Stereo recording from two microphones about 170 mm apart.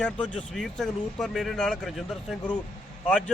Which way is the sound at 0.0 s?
Centre (ahead or behind).